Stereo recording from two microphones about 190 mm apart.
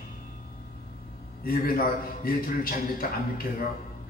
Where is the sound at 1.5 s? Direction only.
50° left (ahead or behind).